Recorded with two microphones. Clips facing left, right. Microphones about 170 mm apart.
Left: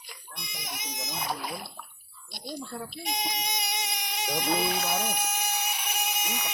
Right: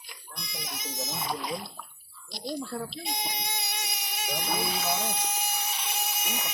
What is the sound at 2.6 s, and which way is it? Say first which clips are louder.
Speech: right 3 dB; 15° left (ahead or behind).